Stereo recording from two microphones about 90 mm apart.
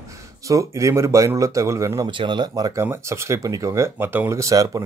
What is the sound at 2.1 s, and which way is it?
Speech, 60° right (ahead or behind).